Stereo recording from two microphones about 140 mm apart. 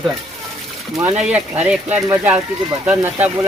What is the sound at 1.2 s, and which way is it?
Speech, 10° right (ahead or behind).